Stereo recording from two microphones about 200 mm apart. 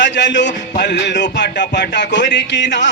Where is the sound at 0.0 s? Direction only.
60° left (ahead or behind).